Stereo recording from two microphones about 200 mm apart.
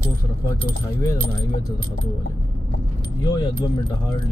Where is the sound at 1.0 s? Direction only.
20° left (ahead or behind).